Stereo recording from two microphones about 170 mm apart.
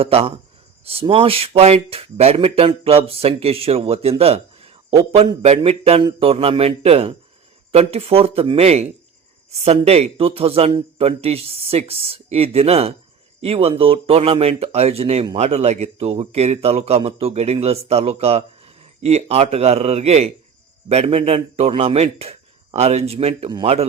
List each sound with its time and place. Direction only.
0.0 s speech: 35° right (ahead or behind)